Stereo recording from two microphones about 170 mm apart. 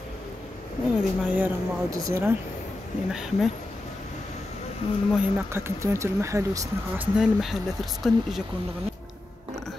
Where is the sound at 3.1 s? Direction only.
5° right (ahead or behind).